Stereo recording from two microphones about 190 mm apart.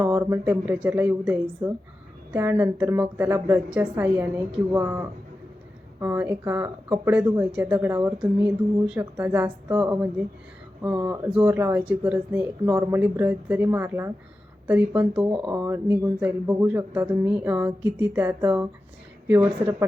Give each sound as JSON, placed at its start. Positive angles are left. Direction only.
{"t": 0.0, "sound": "speech", "side_deg": -10}